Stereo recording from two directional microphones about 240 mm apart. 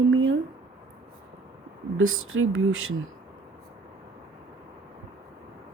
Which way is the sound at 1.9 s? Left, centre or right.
Right.